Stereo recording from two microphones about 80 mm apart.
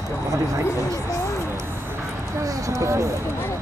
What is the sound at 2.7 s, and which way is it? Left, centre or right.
Speech, right.